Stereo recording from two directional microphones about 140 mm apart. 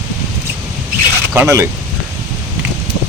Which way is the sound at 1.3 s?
20° right (ahead or behind).